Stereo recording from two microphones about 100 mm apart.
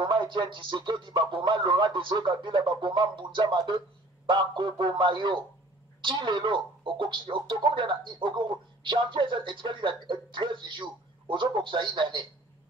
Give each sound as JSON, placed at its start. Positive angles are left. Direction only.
{"t": 0.0, "sound": "speech", "side_deg": -55}